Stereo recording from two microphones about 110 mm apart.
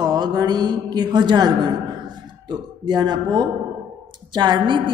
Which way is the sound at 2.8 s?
40° right (ahead or behind).